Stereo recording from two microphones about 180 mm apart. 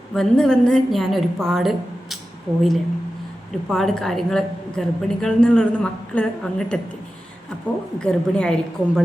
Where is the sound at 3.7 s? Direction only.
Centre (ahead or behind).